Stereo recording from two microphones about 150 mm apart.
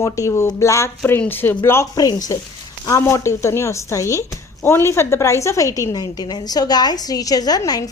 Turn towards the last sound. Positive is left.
turn(degrees=25)  # may be behind; listen again after turning